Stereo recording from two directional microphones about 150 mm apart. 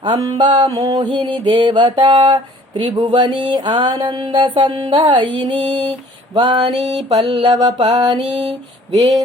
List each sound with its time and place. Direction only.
0.0 s mantra: 30° right (ahead or behind)